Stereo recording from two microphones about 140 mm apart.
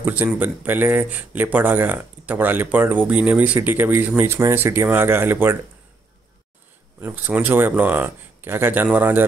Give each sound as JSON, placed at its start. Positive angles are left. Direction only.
{"t": 0.0, "sound": "speech", "side_deg": -10}
{"t": 7.0, "sound": "speech", "side_deg": -15}